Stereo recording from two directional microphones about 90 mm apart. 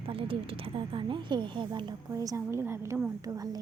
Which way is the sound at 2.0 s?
35° right (ahead or behind).